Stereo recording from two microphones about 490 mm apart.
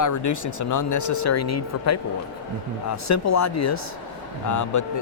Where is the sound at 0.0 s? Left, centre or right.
Left.